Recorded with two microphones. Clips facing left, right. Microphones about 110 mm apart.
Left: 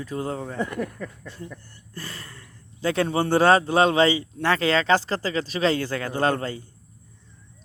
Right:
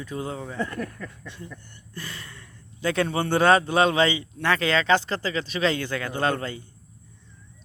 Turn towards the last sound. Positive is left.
turn(degrees=35)  # may be behind; listen again after turning